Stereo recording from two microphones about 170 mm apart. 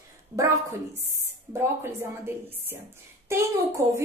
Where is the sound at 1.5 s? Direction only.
15° right (ahead or behind).